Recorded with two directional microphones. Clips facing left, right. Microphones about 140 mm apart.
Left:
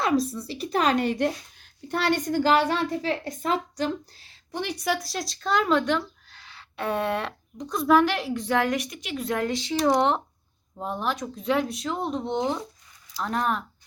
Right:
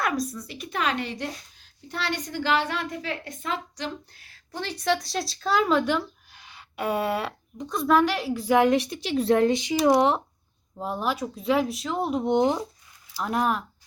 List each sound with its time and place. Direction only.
0.0 s speech: 30° left (ahead or behind)
4.2 s speech: 20° left (ahead or behind); by 8.5 s 5° right (ahead or behind)
8.5 s speech: 25° right (ahead or behind); by 12.2 s 5° right (ahead or behind)
12.2 s speech: 15° right (ahead or behind)